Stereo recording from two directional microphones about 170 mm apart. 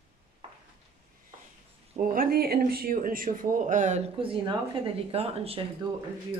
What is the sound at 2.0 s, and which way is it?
Speech, 60° right (ahead or behind).